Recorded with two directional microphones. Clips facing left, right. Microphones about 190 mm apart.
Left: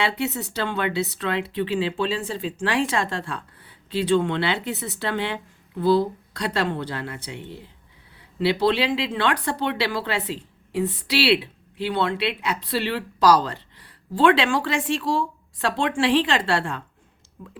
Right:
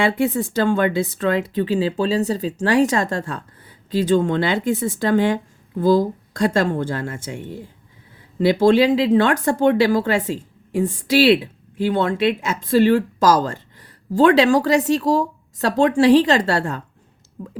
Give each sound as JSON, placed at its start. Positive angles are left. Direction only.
{"t": 0.3, "sound": "speech", "side_deg": -45}